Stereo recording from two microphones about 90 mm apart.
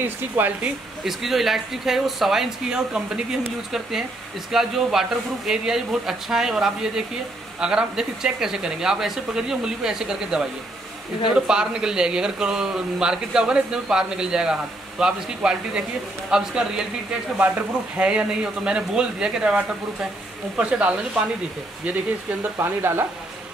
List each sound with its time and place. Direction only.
0.4 s speech: 20° right (ahead or behind)
1.0 s speech: centre (ahead or behind)
22.4 s speech: 25° right (ahead or behind)